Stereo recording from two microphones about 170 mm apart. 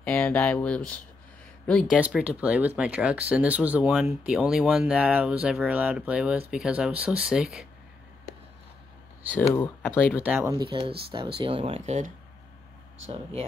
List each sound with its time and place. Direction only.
0.0 s speech: 5° left (ahead or behind)
2.0 s speech: 5° right (ahead or behind)
9.5 s speech: 15° left (ahead or behind)
10.1 s speech: 10° right (ahead or behind)
10.5 s speech: 30° right (ahead or behind)
13.1 s speech: 35° right (ahead or behind)